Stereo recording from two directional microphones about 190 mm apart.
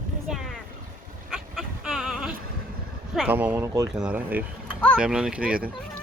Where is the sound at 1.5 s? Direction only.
5° right (ahead or behind).